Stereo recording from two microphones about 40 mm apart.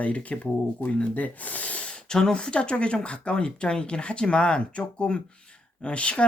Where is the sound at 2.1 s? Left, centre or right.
Centre.